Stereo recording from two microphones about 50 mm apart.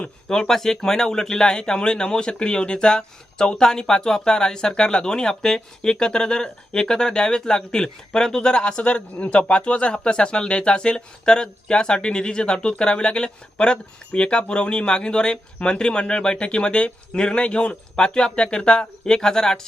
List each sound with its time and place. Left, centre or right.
0.3 s speech: centre